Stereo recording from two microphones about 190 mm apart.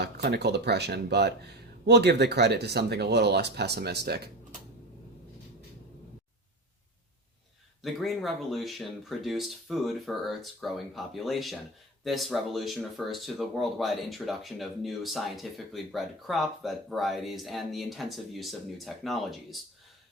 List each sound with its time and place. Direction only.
0.0 s speech: 60° right (ahead or behind)
7.8 s speech: centre (ahead or behind)